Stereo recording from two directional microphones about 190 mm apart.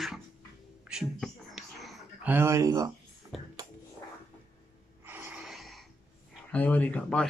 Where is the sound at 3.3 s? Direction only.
Centre (ahead or behind).